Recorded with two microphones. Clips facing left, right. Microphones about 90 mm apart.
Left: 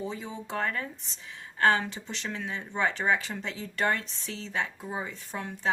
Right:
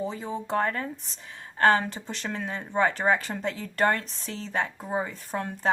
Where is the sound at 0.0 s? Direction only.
40° right (ahead or behind).